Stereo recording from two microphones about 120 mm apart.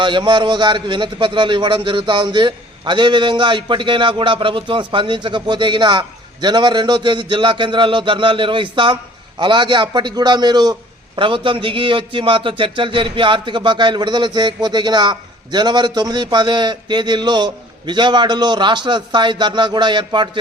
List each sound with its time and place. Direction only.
0.0 s a man's voice: 40° right (ahead or behind)